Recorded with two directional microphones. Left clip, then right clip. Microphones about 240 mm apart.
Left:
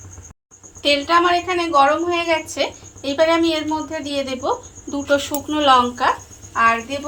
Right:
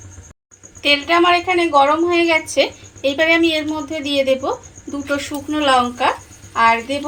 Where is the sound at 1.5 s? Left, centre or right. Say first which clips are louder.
Right 2 dB; centre.